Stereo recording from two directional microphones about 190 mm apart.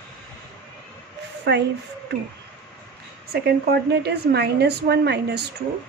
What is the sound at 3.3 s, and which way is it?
A woman's voice, 60° right (ahead or behind).